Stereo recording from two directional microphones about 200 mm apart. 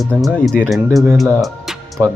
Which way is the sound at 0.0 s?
Centre (ahead or behind).